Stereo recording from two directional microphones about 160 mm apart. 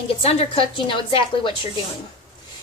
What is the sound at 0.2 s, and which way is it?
A woman's voice, 40° left (ahead or behind).